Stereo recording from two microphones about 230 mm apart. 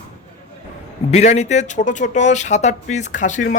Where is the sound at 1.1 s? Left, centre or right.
Left.